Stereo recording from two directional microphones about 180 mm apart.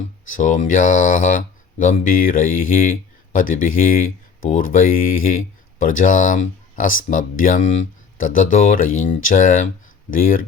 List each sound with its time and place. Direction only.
0.3 s speech: 45° left (ahead or behind)